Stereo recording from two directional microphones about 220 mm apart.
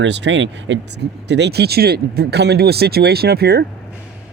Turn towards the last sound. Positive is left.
turn(degrees=-45)  # may be behind; listen again after turning